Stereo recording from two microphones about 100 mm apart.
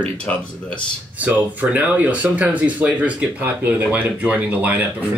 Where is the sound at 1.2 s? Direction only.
15° right (ahead or behind).